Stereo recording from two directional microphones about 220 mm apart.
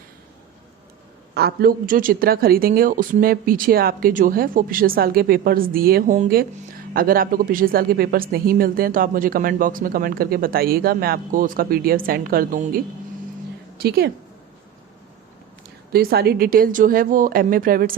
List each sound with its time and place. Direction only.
1.3 s speech: 45° right (ahead or behind)
13.8 s a woman's voice: 45° right (ahead or behind)
15.9 s speech: 45° right (ahead or behind)